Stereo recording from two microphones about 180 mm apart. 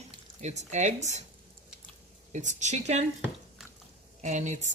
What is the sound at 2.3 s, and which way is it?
Speech, 40° right (ahead or behind).